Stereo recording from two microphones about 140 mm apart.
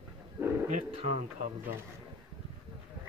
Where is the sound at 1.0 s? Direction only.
55° right (ahead or behind).